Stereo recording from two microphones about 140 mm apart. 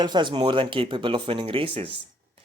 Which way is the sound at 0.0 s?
35° right (ahead or behind).